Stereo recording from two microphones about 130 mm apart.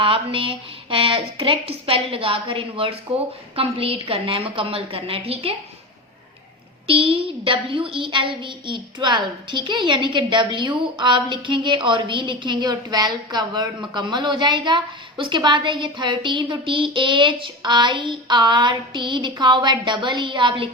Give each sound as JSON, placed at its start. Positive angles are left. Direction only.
{"t": 0.0, "sound": "speech", "side_deg": -45}
{"t": 6.8, "sound": "a child's voice", "side_deg": -45}